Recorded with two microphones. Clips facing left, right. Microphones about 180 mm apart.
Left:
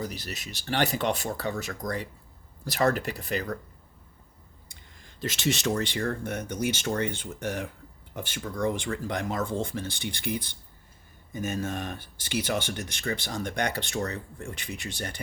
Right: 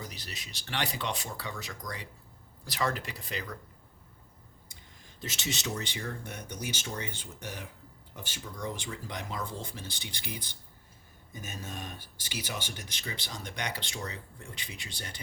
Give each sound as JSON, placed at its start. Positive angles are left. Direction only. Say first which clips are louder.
{"t": 0.3, "sound": "speech", "louder": "left 9 dB", "side_deg": 45}
{"t": 1.0, "sound": "speech", "louder": "left 8 dB", "side_deg": 60}
{"t": 1.5, "sound": "speech", "louder": "left 9 dB", "side_deg": 45}
{"t": 5.4, "sound": "speech", "louder": "left 9 dB", "side_deg": 75}
{"t": 6.0, "sound": "speech", "louder": "left 9 dB", "side_deg": 55}